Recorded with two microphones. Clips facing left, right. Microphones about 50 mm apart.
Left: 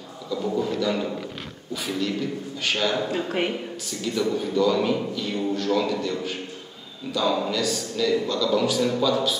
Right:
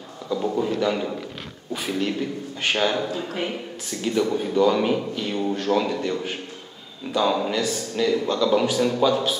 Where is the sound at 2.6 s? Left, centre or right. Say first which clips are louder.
Right 3 dB; right.